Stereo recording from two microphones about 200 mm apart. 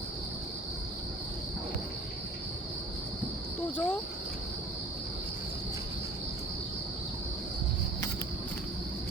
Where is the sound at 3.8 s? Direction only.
10° left (ahead or behind).